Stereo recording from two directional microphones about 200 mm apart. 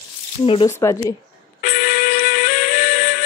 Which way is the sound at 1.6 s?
45° left (ahead or behind).